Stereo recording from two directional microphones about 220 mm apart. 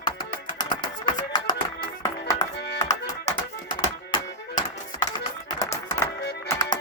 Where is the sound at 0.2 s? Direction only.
20° left (ahead or behind).